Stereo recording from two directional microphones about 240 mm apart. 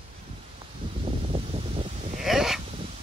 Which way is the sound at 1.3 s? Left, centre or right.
Right.